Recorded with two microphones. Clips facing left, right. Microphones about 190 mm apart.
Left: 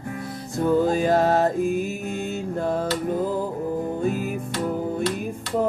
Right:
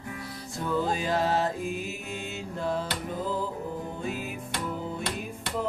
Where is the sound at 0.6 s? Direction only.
45° left (ahead or behind).